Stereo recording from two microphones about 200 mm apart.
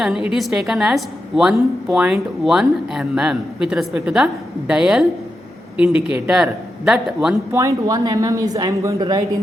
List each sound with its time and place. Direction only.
0.0 s a woman's voice: 5° right (ahead or behind)
7.6 s speech: 20° right (ahead or behind)